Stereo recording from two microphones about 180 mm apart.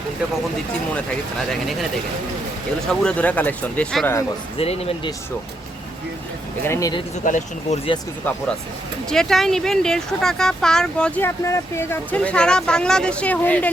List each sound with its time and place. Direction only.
0.9 s speech: centre (ahead or behind)
2.9 s speech: 5° left (ahead or behind)
4.5 s speech: 35° left (ahead or behind)
6.7 s speech: 20° left (ahead or behind)
7.3 s speech: 45° left (ahead or behind)
9.0 s speech: centre (ahead or behind)